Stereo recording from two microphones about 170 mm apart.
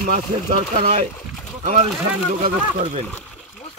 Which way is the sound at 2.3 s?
45° right (ahead or behind).